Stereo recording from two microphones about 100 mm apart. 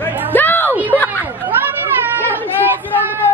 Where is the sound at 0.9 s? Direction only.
15° left (ahead or behind).